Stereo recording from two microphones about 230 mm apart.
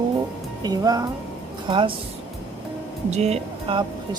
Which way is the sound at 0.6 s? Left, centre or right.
Centre.